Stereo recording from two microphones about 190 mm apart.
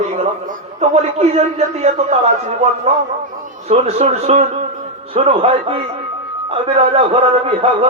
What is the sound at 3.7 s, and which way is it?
A man's voice, 35° right (ahead or behind).